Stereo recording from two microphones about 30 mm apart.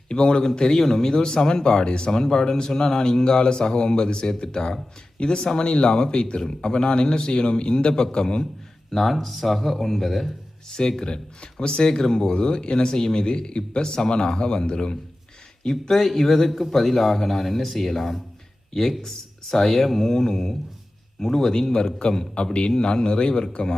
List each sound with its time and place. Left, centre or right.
0.1 s speech: left
8.9 s speech: centre
10.7 s speech: left
15.7 s speech: centre
21.7 s speech: left
22.4 s speech: left